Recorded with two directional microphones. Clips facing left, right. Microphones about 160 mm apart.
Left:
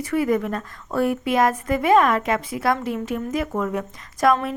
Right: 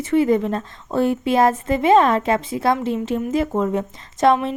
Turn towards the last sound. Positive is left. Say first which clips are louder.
# right 3 dB
turn(degrees=-25)  # may be behind; listen again after turning